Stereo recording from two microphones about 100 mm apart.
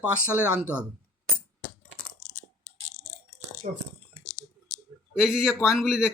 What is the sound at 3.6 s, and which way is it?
Speech, 90° right.